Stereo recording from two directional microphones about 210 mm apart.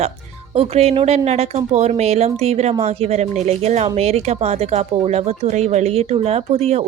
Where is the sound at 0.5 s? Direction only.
30° right (ahead or behind).